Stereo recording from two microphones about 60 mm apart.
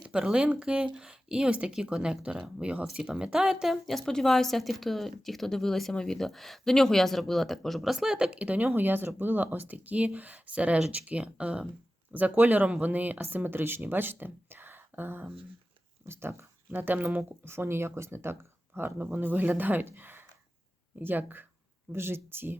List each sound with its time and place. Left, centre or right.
0.0 s a woman's voice: centre
8.6 s speech: right
17.4 s speech: right